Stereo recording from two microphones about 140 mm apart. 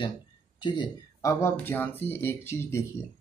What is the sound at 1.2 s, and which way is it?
Speech, 15° left (ahead or behind).